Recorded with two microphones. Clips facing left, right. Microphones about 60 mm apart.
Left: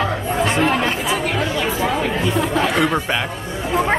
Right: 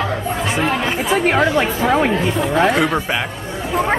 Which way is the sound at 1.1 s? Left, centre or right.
Right.